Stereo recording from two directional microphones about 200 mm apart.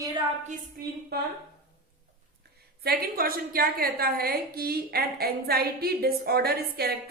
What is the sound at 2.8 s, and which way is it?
A woman's voice, 50° right (ahead or behind).